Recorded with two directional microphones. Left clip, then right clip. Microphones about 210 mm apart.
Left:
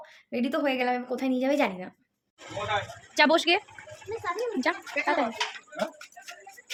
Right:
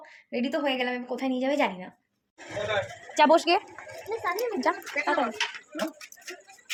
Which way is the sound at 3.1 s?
10° left (ahead or behind).